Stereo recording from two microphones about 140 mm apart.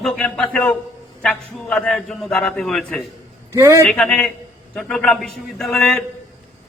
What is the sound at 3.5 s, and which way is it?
Speech, 20° right (ahead or behind).